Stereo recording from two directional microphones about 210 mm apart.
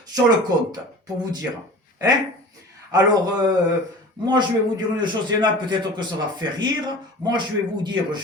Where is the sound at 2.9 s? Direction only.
20° right (ahead or behind).